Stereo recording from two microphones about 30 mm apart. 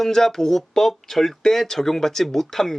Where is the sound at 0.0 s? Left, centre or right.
Centre.